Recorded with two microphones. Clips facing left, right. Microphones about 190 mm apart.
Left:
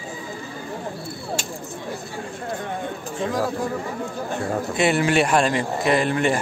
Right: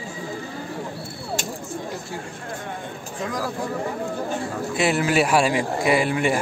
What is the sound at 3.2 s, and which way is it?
Speech, 25° left (ahead or behind).